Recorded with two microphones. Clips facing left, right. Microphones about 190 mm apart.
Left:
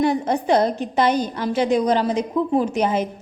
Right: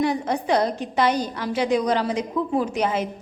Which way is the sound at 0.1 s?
25° left (ahead or behind).